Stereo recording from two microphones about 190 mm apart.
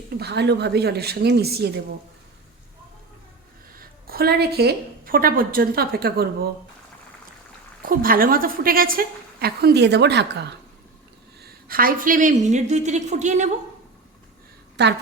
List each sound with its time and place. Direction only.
0.2 s a woman's voice: 60° right (ahead or behind)
3.8 s a woman's voice: 50° right (ahead or behind)
7.8 s a woman's voice: 50° right (ahead or behind)
11.4 s a woman's voice: 50° right (ahead or behind)
14.8 s a woman's voice: 65° right (ahead or behind)